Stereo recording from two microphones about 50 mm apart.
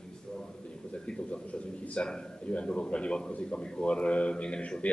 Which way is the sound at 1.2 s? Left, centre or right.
Left.